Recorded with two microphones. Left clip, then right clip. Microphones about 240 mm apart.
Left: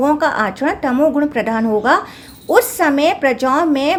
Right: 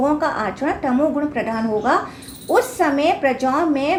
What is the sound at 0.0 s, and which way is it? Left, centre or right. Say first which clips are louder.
A woman's voice: left 4 dB; left.